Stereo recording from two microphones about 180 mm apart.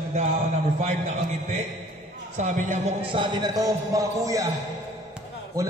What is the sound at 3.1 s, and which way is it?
A man's voice, 25° right (ahead or behind).